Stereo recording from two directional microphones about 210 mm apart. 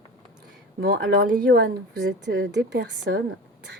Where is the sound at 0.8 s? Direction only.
55° right (ahead or behind).